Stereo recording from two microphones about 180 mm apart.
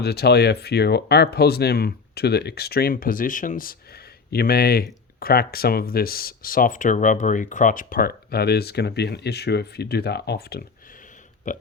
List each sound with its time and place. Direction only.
0.0 s speech: 65° left (ahead or behind)
11.5 s burping: 45° left (ahead or behind)